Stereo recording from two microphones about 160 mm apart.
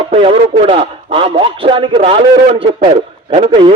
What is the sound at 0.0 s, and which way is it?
A man's voice, 35° right (ahead or behind).